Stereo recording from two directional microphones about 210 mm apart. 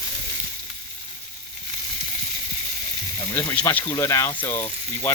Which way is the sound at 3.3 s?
10° left (ahead or behind).